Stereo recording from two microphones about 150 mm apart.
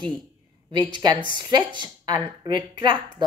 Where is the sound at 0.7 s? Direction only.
30° right (ahead or behind).